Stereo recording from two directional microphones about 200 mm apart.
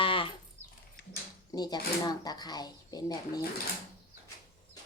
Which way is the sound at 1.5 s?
20° left (ahead or behind).